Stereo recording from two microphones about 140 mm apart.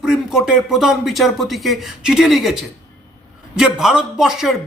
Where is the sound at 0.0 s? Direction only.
5° right (ahead or behind).